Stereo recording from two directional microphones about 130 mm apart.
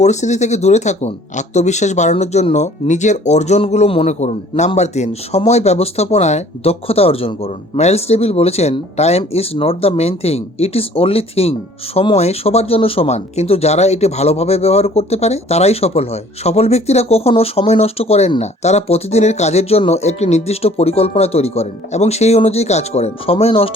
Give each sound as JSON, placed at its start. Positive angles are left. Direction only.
{"t": 0.0, "sound": "speech", "side_deg": 65}